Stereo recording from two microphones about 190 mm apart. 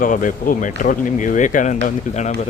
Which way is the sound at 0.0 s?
45° left (ahead or behind).